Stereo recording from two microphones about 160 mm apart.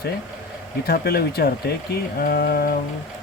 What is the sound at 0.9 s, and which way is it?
Speech, 75° left (ahead or behind).